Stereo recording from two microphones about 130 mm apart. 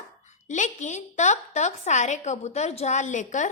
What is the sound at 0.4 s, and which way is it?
A woman's voice, 70° left (ahead or behind).